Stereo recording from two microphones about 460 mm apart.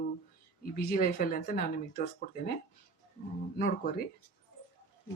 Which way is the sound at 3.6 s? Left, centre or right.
Centre.